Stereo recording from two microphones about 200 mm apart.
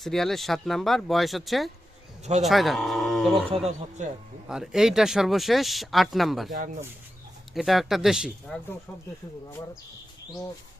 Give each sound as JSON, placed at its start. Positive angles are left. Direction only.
{"t": 0.0, "sound": "speech", "side_deg": 0}
{"t": 3.5, "sound": "speech", "side_deg": -30}
{"t": 4.4, "sound": "speech", "side_deg": -5}
{"t": 7.5, "sound": "speech", "side_deg": 0}